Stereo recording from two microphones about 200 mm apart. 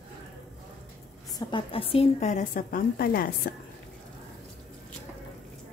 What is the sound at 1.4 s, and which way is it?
A woman's voice, 25° left (ahead or behind).